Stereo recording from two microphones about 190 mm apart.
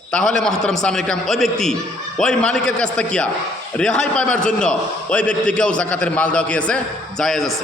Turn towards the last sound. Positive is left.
turn(degrees=0)  # may be behind; listen again after turning